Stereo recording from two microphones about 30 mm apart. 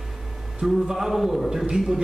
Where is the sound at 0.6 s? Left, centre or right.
Centre.